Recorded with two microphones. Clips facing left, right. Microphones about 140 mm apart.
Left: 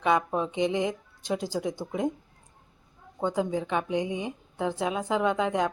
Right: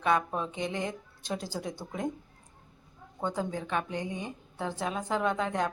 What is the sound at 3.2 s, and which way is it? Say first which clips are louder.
A woman's voice: left 5 dB; 15° left (ahead or behind).